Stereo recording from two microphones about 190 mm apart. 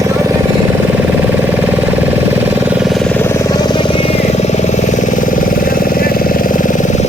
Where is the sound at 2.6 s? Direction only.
5° right (ahead or behind).